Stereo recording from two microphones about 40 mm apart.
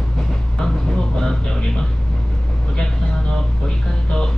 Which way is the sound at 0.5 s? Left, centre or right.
Centre.